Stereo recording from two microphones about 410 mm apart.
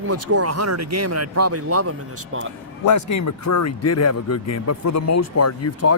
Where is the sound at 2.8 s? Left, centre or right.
Left.